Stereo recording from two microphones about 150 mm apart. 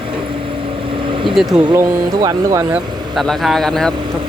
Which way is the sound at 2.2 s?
25° right (ahead or behind).